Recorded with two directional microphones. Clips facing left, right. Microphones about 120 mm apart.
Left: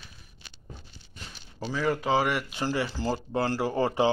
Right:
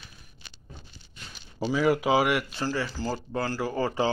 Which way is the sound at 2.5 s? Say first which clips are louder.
Left 1 dB; 20° left (ahead or behind).